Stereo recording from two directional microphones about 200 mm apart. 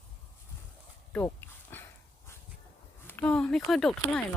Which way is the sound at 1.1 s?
10° left (ahead or behind).